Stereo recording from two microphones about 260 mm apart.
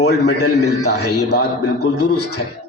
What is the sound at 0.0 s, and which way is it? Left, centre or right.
A man's voice, left.